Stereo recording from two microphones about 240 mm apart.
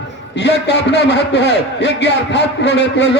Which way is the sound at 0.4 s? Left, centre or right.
Left.